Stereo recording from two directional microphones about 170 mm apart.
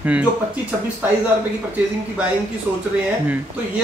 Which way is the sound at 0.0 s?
10° right (ahead or behind).